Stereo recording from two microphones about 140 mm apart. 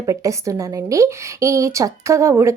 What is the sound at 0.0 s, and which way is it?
A woman's voice, 20° right (ahead or behind).